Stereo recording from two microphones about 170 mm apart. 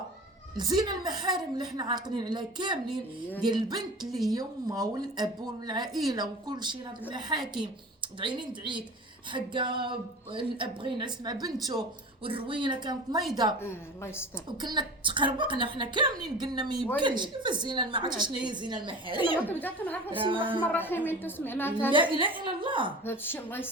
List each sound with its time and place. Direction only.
0.5 s a woman's voice: 25° right (ahead or behind)
4.0 s a woman's voice: centre (ahead or behind)
4.3 s a woman's voice: 20° right (ahead or behind)
13.6 s a woman's voice: 15° left (ahead or behind)
14.6 s a woman's voice: 25° right (ahead or behind)
19.5 s a woman's voice: 10° left (ahead or behind)
20.2 s a woman's voice: 30° right (ahead or behind)
20.6 s a woman's voice: 10° left (ahead or behind)
21.9 s a woman's voice: 30° right (ahead or behind)
23.0 s a woman's voice: 10° left (ahead or behind)